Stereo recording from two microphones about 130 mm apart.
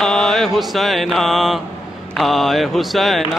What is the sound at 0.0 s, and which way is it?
Mantra, centre (ahead or behind).